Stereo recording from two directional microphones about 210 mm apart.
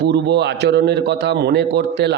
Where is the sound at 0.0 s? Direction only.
50° right (ahead or behind).